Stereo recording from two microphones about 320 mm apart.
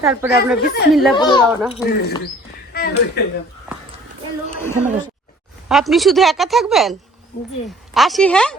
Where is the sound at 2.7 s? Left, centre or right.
Left.